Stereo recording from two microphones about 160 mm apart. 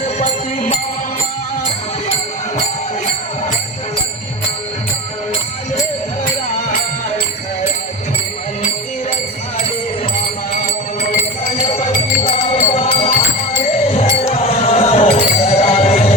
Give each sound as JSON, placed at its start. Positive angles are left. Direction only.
{"t": 0.0, "sound": "music", "side_deg": 45}
{"t": 11.6, "sound": "music", "side_deg": 40}